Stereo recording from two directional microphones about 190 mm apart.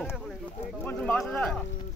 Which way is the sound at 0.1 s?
Centre (ahead or behind).